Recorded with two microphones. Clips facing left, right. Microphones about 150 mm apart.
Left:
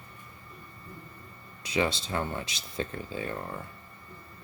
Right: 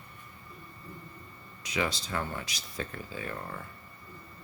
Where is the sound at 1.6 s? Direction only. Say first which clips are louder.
Left 4 dB; 30° left (ahead or behind).